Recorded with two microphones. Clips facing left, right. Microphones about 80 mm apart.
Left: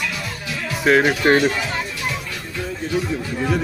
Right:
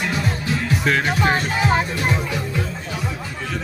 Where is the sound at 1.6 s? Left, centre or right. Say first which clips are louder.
Right 6 dB; right.